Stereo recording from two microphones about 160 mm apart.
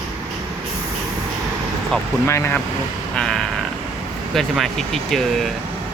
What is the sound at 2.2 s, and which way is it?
Speech, 15° left (ahead or behind).